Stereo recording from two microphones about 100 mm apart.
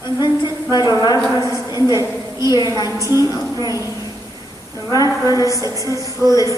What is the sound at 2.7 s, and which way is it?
A woman's voice, 35° left (ahead or behind).